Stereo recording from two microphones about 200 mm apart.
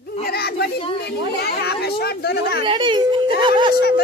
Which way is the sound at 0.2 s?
50° left (ahead or behind).